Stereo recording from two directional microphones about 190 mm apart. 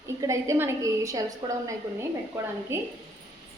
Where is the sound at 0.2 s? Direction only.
15° right (ahead or behind).